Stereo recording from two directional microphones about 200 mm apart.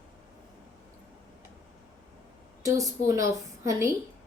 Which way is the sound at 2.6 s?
15° right (ahead or behind).